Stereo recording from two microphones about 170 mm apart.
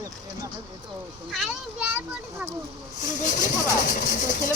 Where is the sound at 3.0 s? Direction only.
50° left (ahead or behind).